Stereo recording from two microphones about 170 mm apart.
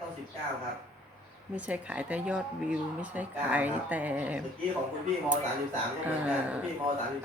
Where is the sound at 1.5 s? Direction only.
10° right (ahead or behind).